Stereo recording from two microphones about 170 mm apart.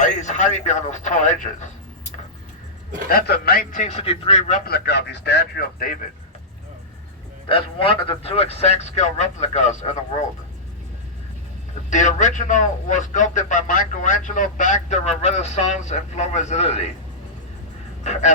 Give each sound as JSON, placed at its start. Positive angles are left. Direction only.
{"t": 0.0, "sound": "a man's voice", "side_deg": 45}
{"t": 3.1, "sound": "a man's voice", "side_deg": 65}
{"t": 3.8, "sound": "a man's voice", "side_deg": 35}
{"t": 4.6, "sound": "speech", "side_deg": 70}
{"t": 7.4, "sound": "a man's voice", "side_deg": 30}
{"t": 11.9, "sound": "a man's voice", "side_deg": 45}
{"t": 18.0, "sound": "honk", "side_deg": 40}